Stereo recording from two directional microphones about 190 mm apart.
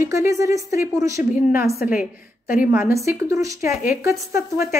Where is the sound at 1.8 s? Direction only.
50° left (ahead or behind).